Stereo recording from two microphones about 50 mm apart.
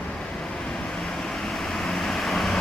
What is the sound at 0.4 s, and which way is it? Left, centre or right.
Vehicle, centre.